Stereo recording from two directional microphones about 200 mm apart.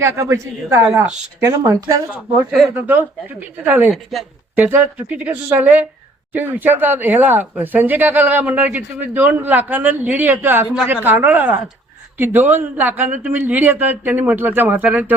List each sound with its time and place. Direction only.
0.0 s speech: 15° right (ahead or behind)
2.5 s a man's voice: centre (ahead or behind)